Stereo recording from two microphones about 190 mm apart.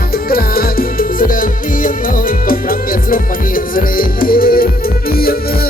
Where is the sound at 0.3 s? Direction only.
50° left (ahead or behind).